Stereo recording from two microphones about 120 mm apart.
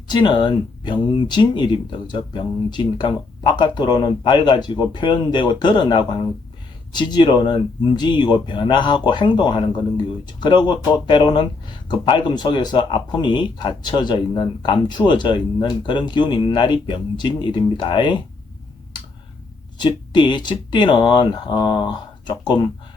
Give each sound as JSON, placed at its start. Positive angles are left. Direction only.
{"t": 0.1, "sound": "speech", "side_deg": 40}
{"t": 19.8, "sound": "speech", "side_deg": 40}